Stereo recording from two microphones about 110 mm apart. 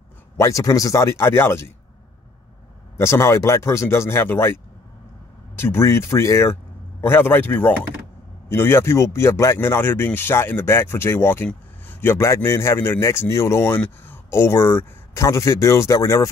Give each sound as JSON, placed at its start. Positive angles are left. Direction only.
{"t": 0.4, "sound": "a man's voice", "side_deg": 30}
{"t": 3.0, "sound": "a man's voice", "side_deg": 25}
{"t": 5.6, "sound": "a man's voice", "side_deg": 20}